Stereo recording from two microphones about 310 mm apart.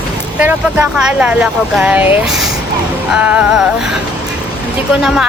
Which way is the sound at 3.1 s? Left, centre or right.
Centre.